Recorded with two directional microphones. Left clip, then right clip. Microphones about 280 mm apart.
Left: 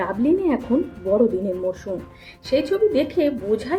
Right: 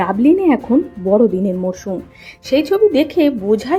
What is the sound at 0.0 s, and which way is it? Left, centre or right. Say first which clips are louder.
Speech: right 7 dB; right.